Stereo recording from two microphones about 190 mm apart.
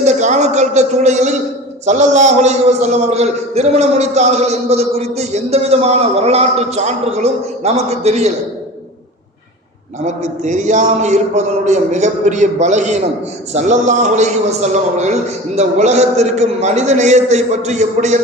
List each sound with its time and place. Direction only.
0.0 s a man's voice: 35° right (ahead or behind)
10.4 s a man's voice: 40° right (ahead or behind)